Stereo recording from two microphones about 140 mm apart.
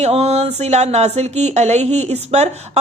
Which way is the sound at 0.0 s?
50° right (ahead or behind).